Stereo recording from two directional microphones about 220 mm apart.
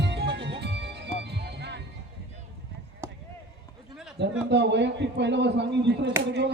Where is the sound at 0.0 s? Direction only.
50° right (ahead or behind).